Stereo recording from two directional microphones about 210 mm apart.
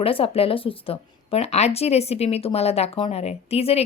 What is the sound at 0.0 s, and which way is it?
A woman's voice, 25° left (ahead or behind).